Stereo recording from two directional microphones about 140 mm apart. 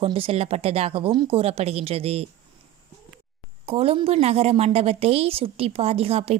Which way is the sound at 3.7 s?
45° right (ahead or behind).